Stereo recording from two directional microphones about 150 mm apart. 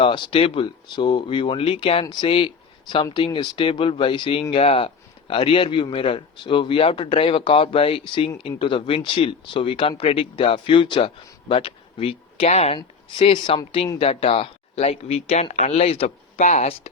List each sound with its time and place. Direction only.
0.0 s speech: 35° left (ahead or behind)